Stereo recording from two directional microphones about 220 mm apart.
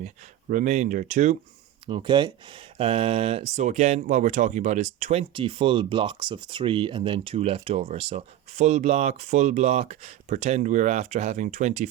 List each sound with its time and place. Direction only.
0.5 s speech: 35° right (ahead or behind)
1.9 s speech: 20° right (ahead or behind)